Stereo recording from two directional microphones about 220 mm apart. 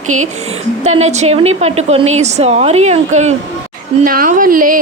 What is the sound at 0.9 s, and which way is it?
Speech, 30° right (ahead or behind).